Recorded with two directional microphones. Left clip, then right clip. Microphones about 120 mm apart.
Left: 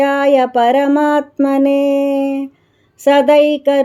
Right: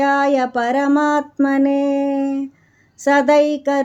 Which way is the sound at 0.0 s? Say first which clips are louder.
Left 4 dB; 20° left (ahead or behind).